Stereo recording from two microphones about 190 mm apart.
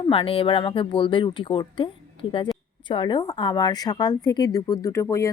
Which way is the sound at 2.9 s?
25° left (ahead or behind).